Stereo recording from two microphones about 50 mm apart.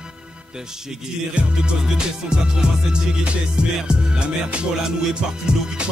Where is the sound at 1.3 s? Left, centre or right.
Centre.